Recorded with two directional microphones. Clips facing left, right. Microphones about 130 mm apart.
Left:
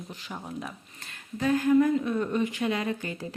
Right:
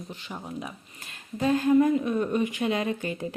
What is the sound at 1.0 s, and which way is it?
A woman's voice, 20° right (ahead or behind).